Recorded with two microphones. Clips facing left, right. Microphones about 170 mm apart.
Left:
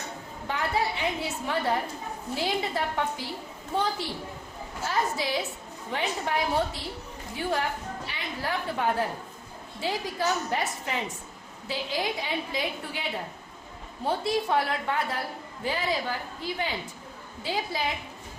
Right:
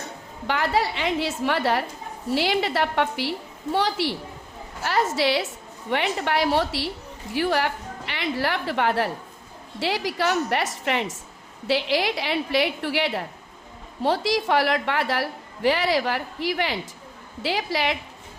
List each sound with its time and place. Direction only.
0.4 s a woman's voice: 90° right